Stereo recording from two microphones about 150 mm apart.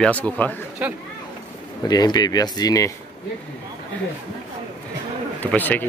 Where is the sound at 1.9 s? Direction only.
25° left (ahead or behind).